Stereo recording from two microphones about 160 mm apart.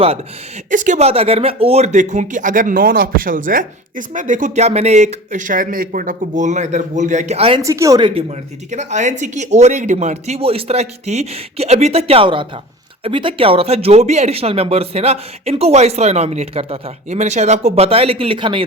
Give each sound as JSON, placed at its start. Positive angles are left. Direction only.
{"t": 0.7, "sound": "speech", "side_deg": -55}
{"t": 7.6, "sound": "speech", "side_deg": -20}
{"t": 8.7, "sound": "speech", "side_deg": -50}